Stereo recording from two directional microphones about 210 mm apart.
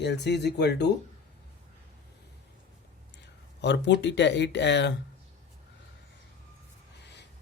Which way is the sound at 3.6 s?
55° left (ahead or behind).